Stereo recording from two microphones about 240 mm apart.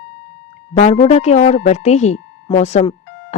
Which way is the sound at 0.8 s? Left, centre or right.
Left.